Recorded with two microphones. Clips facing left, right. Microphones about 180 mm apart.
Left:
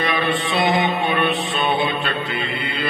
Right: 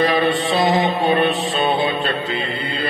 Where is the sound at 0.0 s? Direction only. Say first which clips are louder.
Right 4 dB; 30° right (ahead or behind).